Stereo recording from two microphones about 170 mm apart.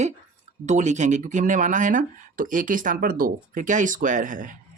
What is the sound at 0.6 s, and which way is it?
Speech, 45° right (ahead or behind).